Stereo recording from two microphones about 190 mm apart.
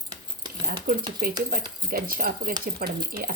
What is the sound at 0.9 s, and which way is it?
Speech, 45° right (ahead or behind).